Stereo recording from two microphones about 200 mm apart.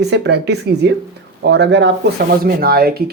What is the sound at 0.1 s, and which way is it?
Speech, 55° right (ahead or behind).